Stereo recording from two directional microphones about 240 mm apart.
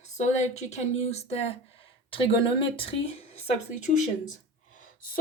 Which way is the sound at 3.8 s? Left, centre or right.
Left.